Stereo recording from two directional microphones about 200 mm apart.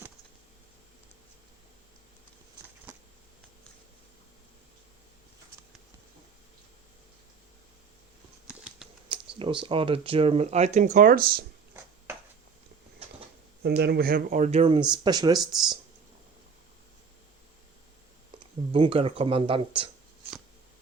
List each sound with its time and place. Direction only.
8.4 s a sound: 5° right (ahead or behind)
9.0 s computer keyboard: 25° right (ahead or behind)
9.6 s speech: 25° right (ahead or behind); by 11.4 s 50° right (ahead or behind)
13.6 s speech: 55° right (ahead or behind); by 15.4 s 20° right (ahead or behind)
18.7 s speech: 25° right (ahead or behind)